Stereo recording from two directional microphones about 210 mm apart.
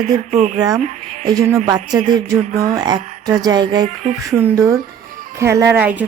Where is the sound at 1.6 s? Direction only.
20° right (ahead or behind).